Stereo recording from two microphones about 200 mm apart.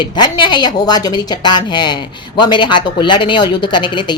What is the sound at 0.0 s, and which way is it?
A woman's voice, 20° left (ahead or behind).